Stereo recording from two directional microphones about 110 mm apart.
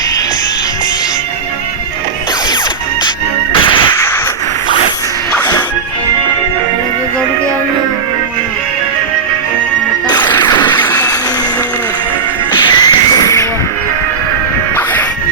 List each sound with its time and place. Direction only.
3.5 s music: 50° left (ahead or behind)
10.1 s music: 40° left (ahead or behind)
12.5 s music: 40° left (ahead or behind)